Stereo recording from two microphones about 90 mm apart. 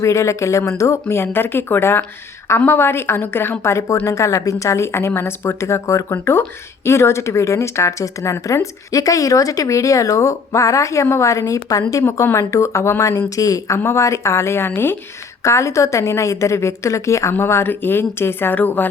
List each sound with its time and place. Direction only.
0.0 s speech: 35° left (ahead or behind)